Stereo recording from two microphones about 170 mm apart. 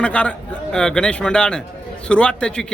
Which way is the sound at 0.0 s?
5° left (ahead or behind).